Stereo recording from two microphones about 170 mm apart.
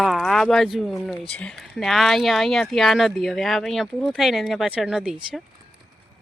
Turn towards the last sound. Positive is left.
turn(degrees=-5)  # may be behind; listen again after turning